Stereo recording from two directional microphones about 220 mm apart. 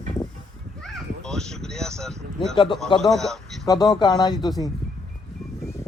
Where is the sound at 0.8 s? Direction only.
Centre (ahead or behind).